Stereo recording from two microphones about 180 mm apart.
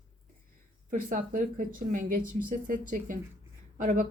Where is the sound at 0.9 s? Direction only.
50° right (ahead or behind).